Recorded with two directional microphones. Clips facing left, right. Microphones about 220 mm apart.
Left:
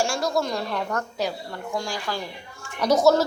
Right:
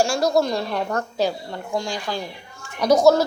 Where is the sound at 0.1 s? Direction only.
40° right (ahead or behind).